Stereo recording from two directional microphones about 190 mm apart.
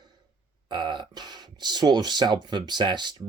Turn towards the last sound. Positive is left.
turn(degrees=-25)  # may be behind; listen again after turning